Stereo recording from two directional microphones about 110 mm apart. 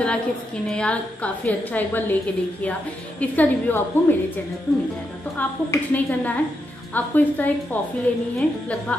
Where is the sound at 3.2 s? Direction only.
15° left (ahead or behind).